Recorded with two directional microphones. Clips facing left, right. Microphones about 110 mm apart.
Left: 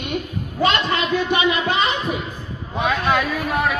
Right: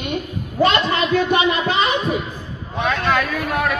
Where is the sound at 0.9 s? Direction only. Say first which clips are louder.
Right 3 dB; 25° right (ahead or behind).